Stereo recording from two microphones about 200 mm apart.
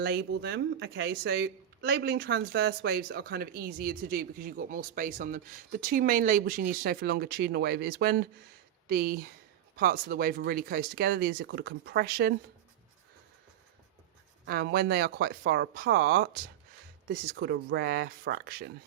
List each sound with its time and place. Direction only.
0.0 s speech: 50° right (ahead or behind)
14.4 s speech: 50° right (ahead or behind)